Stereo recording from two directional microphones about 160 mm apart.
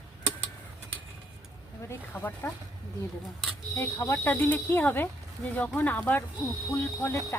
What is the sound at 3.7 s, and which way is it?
Speech, 15° left (ahead or behind).